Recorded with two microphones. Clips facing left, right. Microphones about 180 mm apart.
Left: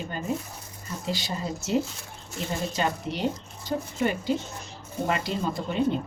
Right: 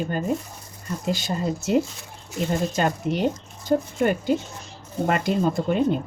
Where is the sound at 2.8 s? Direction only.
50° right (ahead or behind).